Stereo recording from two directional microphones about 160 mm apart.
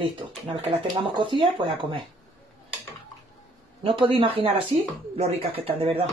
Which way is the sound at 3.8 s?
35° right (ahead or behind).